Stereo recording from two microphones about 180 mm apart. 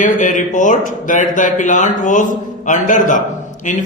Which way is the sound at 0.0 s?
45° left (ahead or behind).